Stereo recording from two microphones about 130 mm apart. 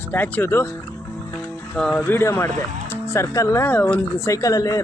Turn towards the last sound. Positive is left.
turn(degrees=25)  # may be behind; listen again after turning